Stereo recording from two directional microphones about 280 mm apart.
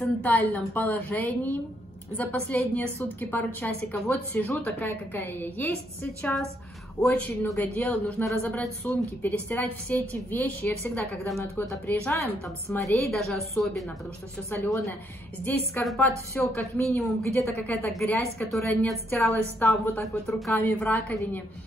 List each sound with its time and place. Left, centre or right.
0.0 s a woman's voice: centre
7.0 s a woman's voice: centre